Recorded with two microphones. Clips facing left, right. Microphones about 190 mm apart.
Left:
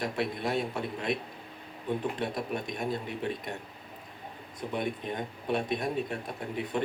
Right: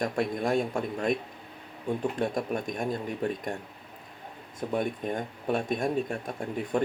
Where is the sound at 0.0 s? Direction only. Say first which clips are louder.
Right 3 dB; 45° right (ahead or behind).